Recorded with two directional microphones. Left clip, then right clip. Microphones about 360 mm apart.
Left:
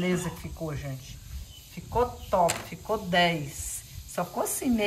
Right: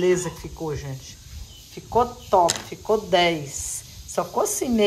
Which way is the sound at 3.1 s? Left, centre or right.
Centre.